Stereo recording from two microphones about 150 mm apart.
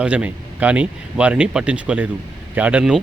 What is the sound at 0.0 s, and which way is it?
Speech, 10° right (ahead or behind).